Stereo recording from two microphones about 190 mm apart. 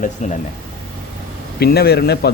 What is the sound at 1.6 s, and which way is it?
Speech, 55° left (ahead or behind).